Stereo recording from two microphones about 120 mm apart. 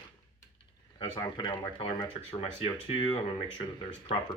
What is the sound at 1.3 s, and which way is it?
Speech, 45° left (ahead or behind).